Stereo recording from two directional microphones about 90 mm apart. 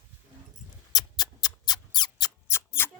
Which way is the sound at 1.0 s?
50° left (ahead or behind).